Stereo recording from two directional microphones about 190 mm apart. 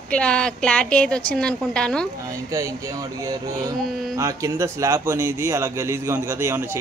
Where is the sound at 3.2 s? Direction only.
20° right (ahead or behind).